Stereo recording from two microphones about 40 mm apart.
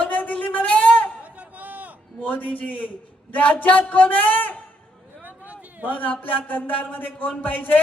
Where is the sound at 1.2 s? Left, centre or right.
Right.